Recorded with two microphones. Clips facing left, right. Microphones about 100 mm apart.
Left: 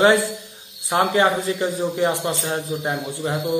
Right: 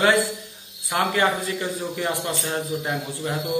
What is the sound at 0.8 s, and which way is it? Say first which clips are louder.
Speech: left 4 dB; 25° left (ahead or behind).